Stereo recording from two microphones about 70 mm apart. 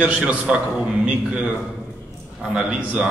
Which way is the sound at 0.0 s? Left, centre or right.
Centre.